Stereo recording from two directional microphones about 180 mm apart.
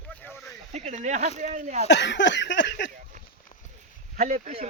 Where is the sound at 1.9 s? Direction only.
80° left.